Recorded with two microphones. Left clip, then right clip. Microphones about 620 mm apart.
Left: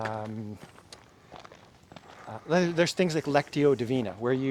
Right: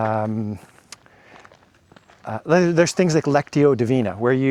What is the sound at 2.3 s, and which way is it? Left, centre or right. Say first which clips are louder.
Speech: right 9 dB; right.